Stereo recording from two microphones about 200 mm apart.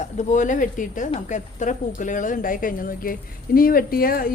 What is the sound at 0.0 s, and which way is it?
Speech, 35° left (ahead or behind).